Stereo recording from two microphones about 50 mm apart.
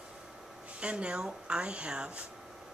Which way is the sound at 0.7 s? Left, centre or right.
Right.